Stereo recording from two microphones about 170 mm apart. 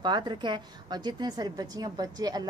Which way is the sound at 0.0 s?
25° right (ahead or behind).